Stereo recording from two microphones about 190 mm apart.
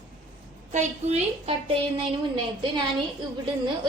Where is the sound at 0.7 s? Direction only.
30° right (ahead or behind).